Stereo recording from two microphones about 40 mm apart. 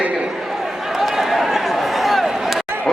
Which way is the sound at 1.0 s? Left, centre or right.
Centre.